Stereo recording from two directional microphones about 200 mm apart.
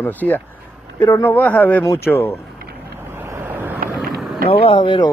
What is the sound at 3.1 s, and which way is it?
Vehicle, 10° right (ahead or behind).